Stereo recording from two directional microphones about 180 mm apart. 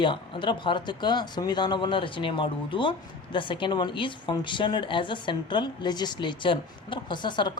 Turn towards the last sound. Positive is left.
turn(degrees=25)  # may be behind; listen again after turning